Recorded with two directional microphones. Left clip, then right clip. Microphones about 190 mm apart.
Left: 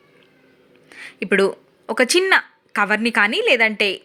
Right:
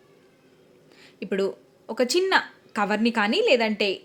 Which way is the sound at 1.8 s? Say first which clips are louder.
Left 6 dB; 10° left (ahead or behind).